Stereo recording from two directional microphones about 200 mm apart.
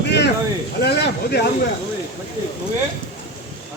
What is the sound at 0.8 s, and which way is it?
Snake, 55° left (ahead or behind).